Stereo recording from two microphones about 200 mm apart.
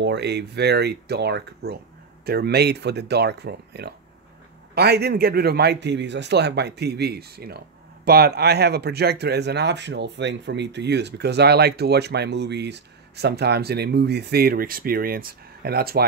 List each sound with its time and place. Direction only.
0.0 s a man's voice: 60° right (ahead or behind)